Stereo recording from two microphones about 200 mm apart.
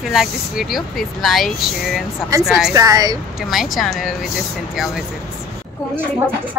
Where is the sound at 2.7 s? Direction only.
20° right (ahead or behind).